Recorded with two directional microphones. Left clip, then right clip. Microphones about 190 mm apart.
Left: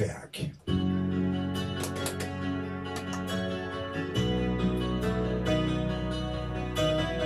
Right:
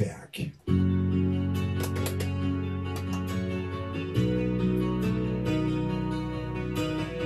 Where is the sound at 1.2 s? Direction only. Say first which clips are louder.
Right 1 dB; 15° right (ahead or behind).